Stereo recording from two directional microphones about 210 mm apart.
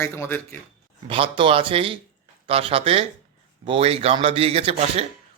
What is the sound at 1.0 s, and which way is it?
Speech, 25° right (ahead or behind).